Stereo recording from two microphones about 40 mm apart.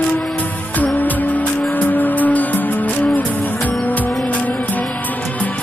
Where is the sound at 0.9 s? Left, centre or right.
Left.